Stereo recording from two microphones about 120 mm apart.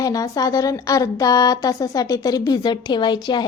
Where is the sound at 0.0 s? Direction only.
30° left (ahead or behind).